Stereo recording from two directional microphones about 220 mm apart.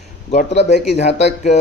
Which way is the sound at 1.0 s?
30° left (ahead or behind).